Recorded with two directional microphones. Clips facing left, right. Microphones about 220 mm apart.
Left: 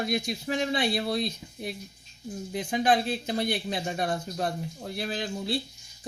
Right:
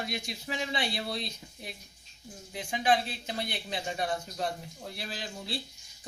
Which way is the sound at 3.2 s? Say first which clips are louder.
Left 8 dB; 45° left (ahead or behind).